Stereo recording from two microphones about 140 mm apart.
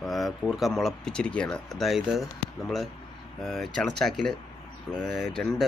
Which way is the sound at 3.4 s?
Centre (ahead or behind).